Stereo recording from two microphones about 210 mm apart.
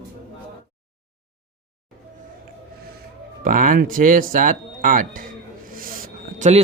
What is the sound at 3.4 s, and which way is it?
Music, 40° right (ahead or behind).